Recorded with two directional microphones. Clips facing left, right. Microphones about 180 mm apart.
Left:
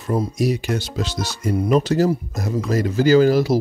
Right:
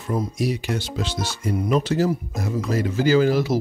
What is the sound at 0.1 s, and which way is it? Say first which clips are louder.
Speech: left 4 dB; 40° left (ahead or behind).